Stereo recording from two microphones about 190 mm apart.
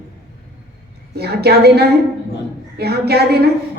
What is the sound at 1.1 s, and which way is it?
A woman's voice, 55° right (ahead or behind).